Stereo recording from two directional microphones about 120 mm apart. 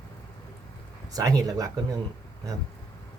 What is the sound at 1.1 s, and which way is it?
Speech, 30° right (ahead or behind).